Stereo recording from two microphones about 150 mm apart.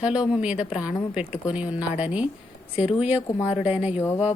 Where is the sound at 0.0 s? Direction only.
5° right (ahead or behind).